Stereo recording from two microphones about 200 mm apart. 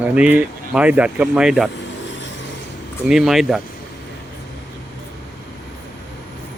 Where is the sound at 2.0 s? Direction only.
65° left (ahead or behind).